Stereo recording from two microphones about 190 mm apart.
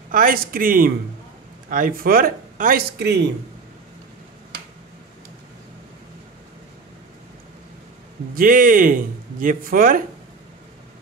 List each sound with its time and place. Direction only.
0.1 s speech: 50° right (ahead or behind)
8.4 s speech: 45° right (ahead or behind)